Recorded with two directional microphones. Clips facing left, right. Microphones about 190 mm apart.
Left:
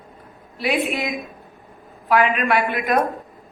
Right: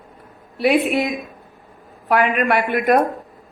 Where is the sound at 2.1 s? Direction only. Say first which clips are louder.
Right 1 dB; 50° right (ahead or behind).